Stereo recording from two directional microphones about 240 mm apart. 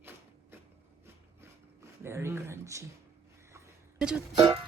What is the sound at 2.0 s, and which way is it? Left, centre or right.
Speech, centre.